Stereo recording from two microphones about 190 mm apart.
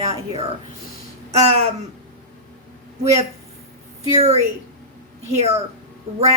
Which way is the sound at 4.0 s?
35° right (ahead or behind).